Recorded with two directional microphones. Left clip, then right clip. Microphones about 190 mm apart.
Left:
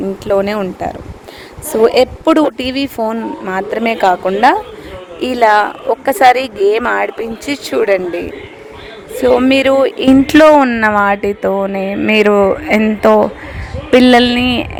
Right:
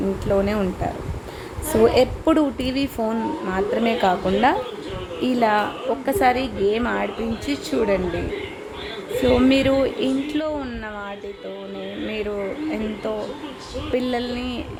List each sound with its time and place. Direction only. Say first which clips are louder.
0.3 s a woman's voice: left 8 dB; 50° left (ahead or behind)
9.2 s a woman's voice: left 8 dB; 55° left (ahead or behind)